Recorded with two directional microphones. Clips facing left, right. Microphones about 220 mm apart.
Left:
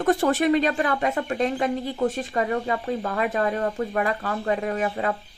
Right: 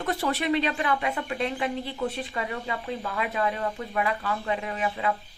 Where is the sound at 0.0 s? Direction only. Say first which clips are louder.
Left 7 dB; 50° left (ahead or behind).